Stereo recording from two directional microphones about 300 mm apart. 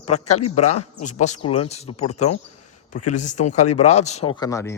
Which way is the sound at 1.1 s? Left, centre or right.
Left.